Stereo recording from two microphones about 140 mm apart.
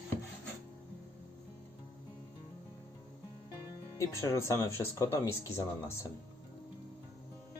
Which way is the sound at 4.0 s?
20° left (ahead or behind).